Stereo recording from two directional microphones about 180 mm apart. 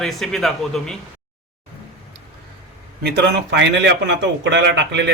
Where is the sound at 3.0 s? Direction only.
65° right (ahead or behind).